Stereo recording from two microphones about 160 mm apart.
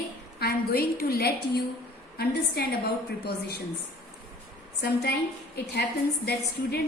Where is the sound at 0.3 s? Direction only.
75° left (ahead or behind).